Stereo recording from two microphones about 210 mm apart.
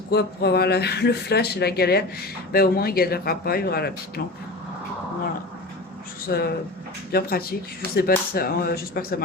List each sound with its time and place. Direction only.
0.1 s speech: 50° left (ahead or behind)
6.2 s speech: 45° left (ahead or behind)